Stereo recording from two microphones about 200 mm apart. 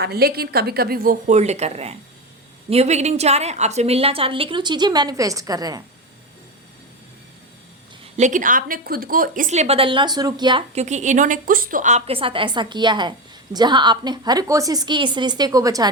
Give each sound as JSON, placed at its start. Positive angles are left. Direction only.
{"t": 0.0, "sound": "a woman's voice", "side_deg": -50}
{"t": 8.1, "sound": "a woman's voice", "side_deg": -40}
{"t": 10.8, "sound": "a woman's voice", "side_deg": -35}